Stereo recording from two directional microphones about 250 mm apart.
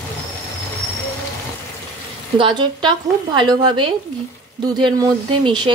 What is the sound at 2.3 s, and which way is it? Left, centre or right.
A woman's voice, centre.